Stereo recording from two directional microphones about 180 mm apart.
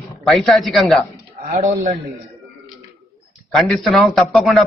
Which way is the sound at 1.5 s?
40° right (ahead or behind).